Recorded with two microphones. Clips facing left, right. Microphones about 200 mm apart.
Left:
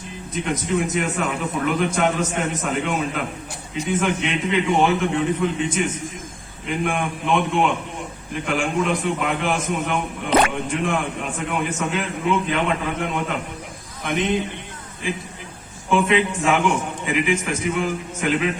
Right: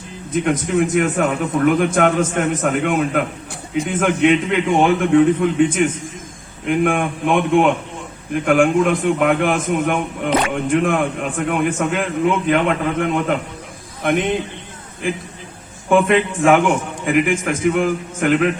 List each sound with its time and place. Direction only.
0.3 s a man's voice: 55° right (ahead or behind)
15.9 s a man's voice: 50° right (ahead or behind)